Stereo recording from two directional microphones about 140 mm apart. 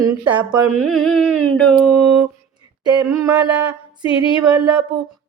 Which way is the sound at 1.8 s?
5° right (ahead or behind).